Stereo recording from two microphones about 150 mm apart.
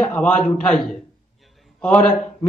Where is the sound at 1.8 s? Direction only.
10° left (ahead or behind).